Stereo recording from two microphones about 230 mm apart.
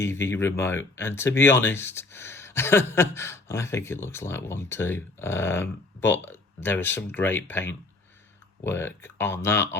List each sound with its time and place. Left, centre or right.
0.0 s speech: centre